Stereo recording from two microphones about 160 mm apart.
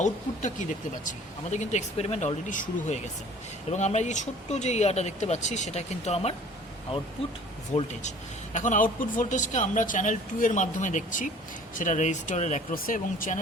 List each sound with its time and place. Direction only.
0.0 s speech: 50° left (ahead or behind)
7.7 s speech: 45° left (ahead or behind)
12.7 s speech: 60° left (ahead or behind)